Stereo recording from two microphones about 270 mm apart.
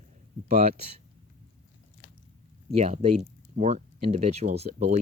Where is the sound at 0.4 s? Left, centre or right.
Right.